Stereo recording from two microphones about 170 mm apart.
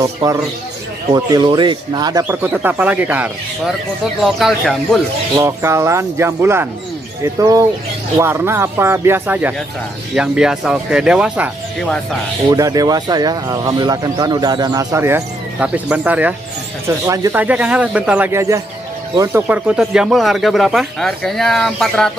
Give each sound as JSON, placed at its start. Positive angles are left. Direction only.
{"t": 0.0, "sound": "speech", "side_deg": -20}
{"t": 2.2, "sound": "speech", "side_deg": -10}
{"t": 5.4, "sound": "speech", "side_deg": -15}
{"t": 12.4, "sound": "speech", "side_deg": -20}